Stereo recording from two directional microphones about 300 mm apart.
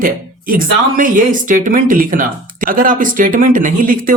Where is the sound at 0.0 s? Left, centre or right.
Right.